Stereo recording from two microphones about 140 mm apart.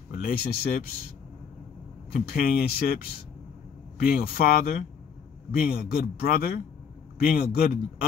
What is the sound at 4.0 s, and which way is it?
Speech, 90° left.